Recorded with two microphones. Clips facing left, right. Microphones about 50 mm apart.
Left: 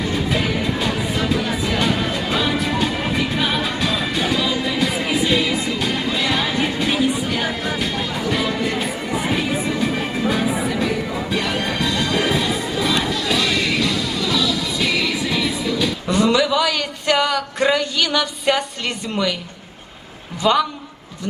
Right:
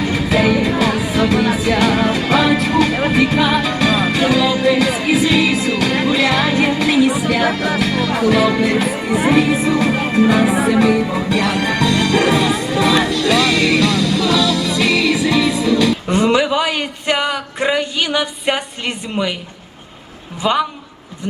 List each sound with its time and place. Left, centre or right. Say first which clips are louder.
0.1 s music: right 8 dB; right
16.0 s a sound: right 2 dB; right
20.4 s a man's voice: even; centre